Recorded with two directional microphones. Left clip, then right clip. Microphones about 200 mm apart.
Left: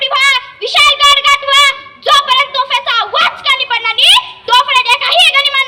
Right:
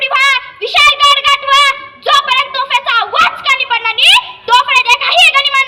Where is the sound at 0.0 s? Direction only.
30° right (ahead or behind).